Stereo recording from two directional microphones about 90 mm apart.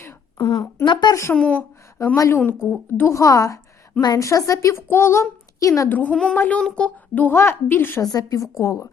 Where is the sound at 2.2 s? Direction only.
30° left (ahead or behind).